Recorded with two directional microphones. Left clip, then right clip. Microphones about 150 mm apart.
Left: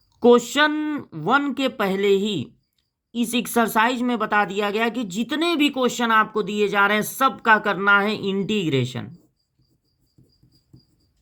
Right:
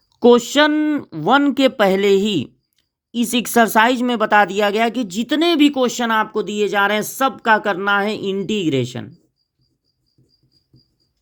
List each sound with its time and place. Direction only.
0.1 s speech: 30° right (ahead or behind)